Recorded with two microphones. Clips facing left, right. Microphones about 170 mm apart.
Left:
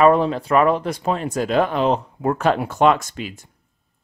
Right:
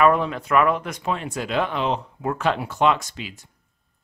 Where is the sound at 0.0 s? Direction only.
30° left (ahead or behind).